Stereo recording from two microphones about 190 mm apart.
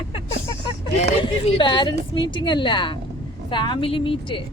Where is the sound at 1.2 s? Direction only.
25° left (ahead or behind).